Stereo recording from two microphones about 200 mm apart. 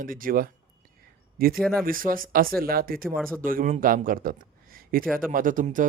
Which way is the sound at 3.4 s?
45° right (ahead or behind).